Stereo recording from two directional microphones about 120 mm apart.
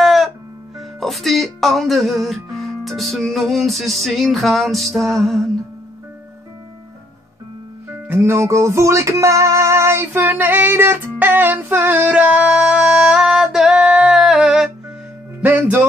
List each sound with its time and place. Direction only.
0.0 s music: centre (ahead or behind)
7.9 s music: 20° right (ahead or behind)